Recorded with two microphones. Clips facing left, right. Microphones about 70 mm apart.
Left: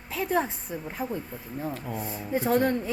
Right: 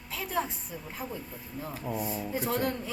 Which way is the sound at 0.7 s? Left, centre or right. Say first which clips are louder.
Left 6 dB; left.